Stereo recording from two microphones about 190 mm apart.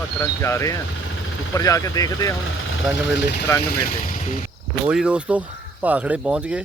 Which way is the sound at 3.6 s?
50° left (ahead or behind).